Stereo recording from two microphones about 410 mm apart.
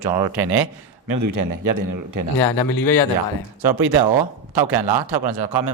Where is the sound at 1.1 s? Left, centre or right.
Right.